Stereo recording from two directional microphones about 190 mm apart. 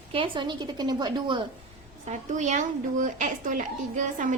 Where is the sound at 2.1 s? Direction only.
40° right (ahead or behind).